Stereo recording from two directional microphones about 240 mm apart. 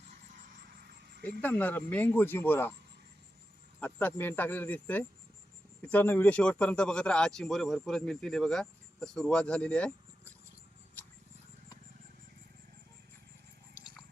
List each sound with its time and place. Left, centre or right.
0.3 s a sound: right
1.4 s speech: centre
3.8 s a man's voice: centre